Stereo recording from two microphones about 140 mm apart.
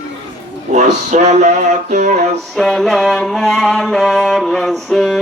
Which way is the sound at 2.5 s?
Centre (ahead or behind).